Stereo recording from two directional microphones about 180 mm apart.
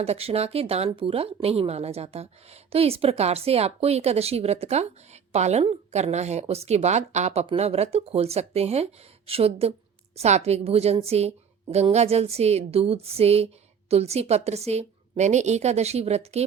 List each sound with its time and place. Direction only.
0.0 s speech: 35° right (ahead or behind)